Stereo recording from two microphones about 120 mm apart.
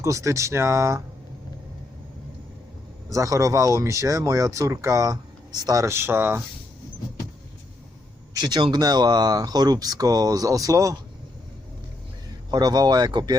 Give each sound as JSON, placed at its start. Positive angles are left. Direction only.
{"t": 0.0, "sound": "speech", "side_deg": -25}
{"t": 3.1, "sound": "speech", "side_deg": -25}
{"t": 8.3, "sound": "speech", "side_deg": -35}
{"t": 12.5, "sound": "speech", "side_deg": -35}